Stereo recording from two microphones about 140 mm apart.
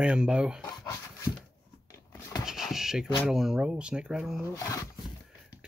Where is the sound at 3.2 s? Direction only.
5° right (ahead or behind).